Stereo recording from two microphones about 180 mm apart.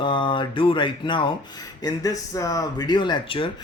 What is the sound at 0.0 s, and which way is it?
Speech, 25° left (ahead or behind).